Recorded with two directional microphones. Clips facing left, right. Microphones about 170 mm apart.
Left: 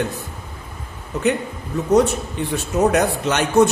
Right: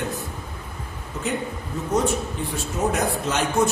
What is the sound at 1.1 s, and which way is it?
Speech, 70° left (ahead or behind).